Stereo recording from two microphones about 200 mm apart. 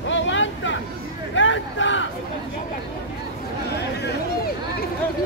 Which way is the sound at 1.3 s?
70° left (ahead or behind).